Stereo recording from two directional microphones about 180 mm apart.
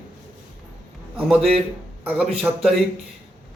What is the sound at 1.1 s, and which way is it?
A man's voice, centre (ahead or behind).